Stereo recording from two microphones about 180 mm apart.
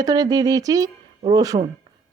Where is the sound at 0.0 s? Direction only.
20° right (ahead or behind).